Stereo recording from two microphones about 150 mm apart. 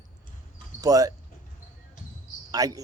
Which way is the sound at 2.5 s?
25° right (ahead or behind).